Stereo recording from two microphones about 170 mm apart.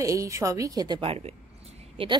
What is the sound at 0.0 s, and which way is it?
A woman's voice, 20° right (ahead or behind).